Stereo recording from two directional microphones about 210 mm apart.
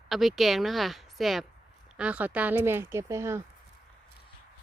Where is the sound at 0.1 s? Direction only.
Centre (ahead or behind).